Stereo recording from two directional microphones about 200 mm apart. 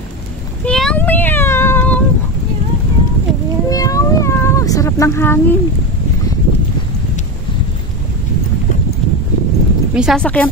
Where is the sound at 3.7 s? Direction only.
15° left (ahead or behind).